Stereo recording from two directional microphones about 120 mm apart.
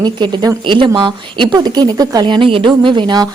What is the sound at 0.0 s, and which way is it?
A woman's voice, 40° right (ahead or behind).